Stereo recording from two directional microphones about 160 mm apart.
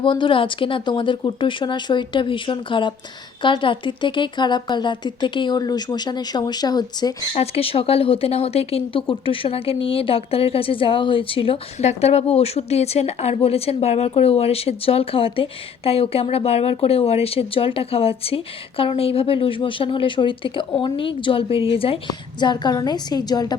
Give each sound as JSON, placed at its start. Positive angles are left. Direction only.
{"t": 0.0, "sound": "a woman's voice", "side_deg": 30}
{"t": 7.3, "sound": "speech", "side_deg": 40}